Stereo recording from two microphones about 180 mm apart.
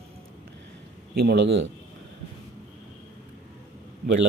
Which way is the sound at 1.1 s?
65° right (ahead or behind).